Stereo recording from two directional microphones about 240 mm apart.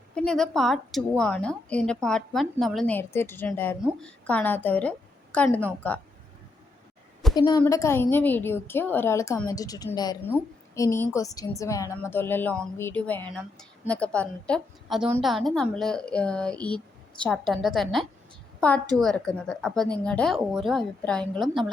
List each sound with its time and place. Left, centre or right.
0.1 s a woman's voice: centre
7.3 s a woman's voice: centre